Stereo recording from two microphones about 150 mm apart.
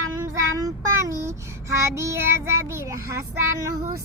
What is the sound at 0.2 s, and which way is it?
Child singing, 20° right (ahead or behind).